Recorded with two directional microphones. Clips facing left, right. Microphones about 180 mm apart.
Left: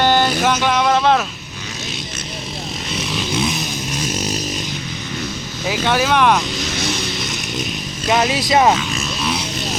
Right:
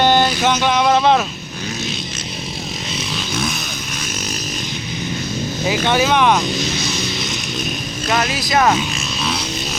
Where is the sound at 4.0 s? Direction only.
35° left (ahead or behind).